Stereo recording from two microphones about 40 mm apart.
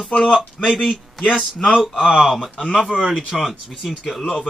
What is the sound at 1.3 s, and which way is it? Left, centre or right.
Speech, centre.